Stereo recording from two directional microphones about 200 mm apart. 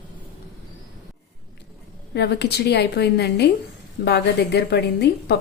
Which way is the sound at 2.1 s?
55° left (ahead or behind).